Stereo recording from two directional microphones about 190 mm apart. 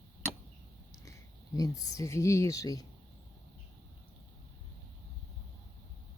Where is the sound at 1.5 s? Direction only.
20° left (ahead or behind).